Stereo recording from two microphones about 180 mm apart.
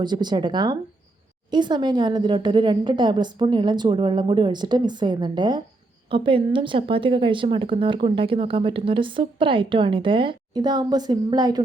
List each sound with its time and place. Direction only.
0.0 s a woman's voice: 25° right (ahead or behind)